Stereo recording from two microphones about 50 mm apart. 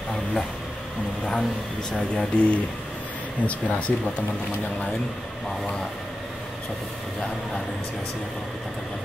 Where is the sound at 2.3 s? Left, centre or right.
Left.